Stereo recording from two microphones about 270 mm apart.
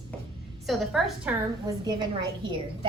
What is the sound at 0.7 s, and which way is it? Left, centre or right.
Speech, centre.